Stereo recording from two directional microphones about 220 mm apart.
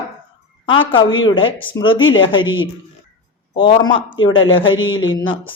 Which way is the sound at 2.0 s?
60° left (ahead or behind).